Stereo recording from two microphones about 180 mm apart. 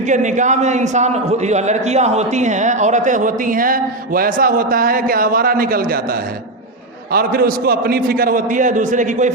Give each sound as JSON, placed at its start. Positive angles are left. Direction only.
{"t": 0.1, "sound": "a man's voice", "side_deg": -45}